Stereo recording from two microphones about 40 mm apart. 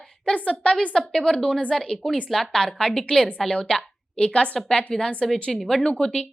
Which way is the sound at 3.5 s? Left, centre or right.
Left.